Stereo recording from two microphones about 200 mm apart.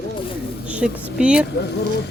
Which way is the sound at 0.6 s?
5° right (ahead or behind).